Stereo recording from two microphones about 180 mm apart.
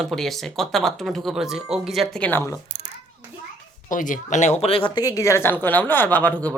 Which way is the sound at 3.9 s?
45° left (ahead or behind).